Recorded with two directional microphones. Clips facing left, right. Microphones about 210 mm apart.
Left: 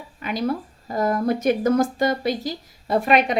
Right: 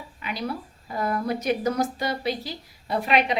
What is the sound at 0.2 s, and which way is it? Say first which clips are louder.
A woman's voice: left 7 dB; 45° left (ahead or behind).